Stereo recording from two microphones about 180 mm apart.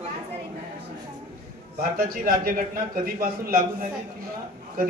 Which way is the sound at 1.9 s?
50° right (ahead or behind).